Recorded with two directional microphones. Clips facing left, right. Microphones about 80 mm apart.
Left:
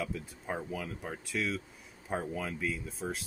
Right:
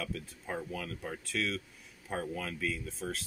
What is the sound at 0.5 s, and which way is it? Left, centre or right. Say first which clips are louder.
Speech: left 1 dB; left.